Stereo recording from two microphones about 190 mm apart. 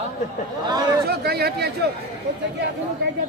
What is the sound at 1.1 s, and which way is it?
Speech, 55° right (ahead or behind).